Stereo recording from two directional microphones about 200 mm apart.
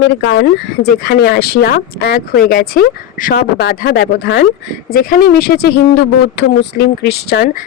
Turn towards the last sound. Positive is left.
turn(degrees=50)  # may be behind; listen again after turning